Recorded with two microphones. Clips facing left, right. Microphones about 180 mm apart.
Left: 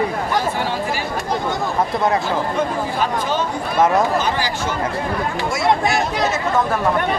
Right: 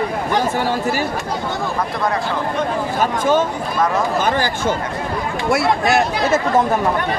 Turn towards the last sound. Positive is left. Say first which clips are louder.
# right 3 dB
turn(degrees=-60)  # may be behind; listen again after turning